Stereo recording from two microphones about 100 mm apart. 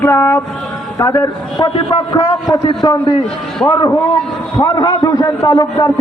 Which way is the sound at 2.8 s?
40° left (ahead or behind).